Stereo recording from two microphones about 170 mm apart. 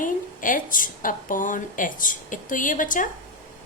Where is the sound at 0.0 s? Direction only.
50° left (ahead or behind).